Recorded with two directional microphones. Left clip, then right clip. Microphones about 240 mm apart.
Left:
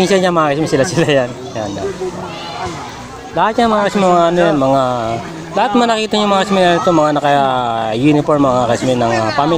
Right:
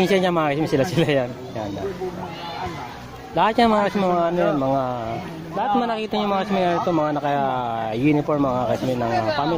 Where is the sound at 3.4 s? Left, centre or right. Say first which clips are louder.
Left 5 dB; centre.